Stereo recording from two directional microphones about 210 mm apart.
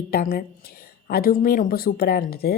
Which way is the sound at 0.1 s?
45° left (ahead or behind).